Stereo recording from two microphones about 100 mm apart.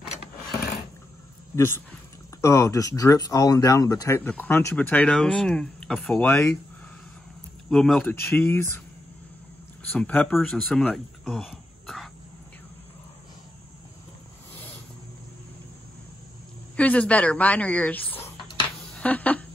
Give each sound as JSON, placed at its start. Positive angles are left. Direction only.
{"t": 1.5, "sound": "speech", "side_deg": 30}
{"t": 4.2, "sound": "speech", "side_deg": 20}
{"t": 7.7, "sound": "speech", "side_deg": 5}
{"t": 8.1, "sound": "speech", "side_deg": 20}
{"t": 9.8, "sound": "speech", "side_deg": 15}
{"t": 10.3, "sound": "speech", "side_deg": 0}
{"t": 11.8, "sound": "throat clearing", "side_deg": 5}
{"t": 16.7, "sound": "speech", "side_deg": 15}